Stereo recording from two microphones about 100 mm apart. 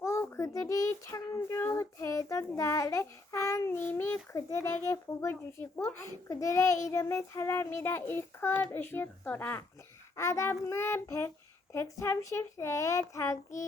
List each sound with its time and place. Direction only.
0.0 s a child's voice: 30° left (ahead or behind)